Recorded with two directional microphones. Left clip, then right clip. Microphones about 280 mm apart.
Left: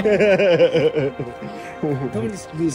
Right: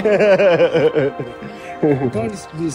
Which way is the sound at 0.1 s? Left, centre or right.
Right.